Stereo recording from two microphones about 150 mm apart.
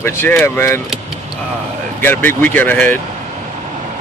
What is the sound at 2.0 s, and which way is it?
Speech, 15° left (ahead or behind).